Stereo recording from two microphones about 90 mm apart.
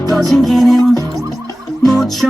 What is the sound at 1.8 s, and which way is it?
Music, 5° left (ahead or behind).